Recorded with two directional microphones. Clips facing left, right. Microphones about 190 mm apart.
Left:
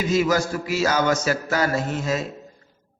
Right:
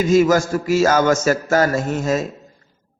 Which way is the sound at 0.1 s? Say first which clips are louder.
Right 6 dB; 45° right (ahead or behind).